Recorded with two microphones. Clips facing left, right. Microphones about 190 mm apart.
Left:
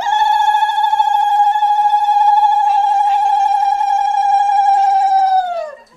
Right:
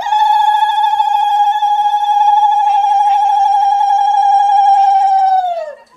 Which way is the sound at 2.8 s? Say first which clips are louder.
Right 2 dB; 20° right (ahead or behind).